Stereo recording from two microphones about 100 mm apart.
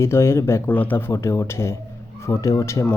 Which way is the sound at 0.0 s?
25° left (ahead or behind).